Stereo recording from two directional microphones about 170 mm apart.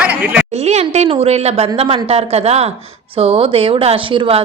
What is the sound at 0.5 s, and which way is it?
A woman's voice, 40° right (ahead or behind).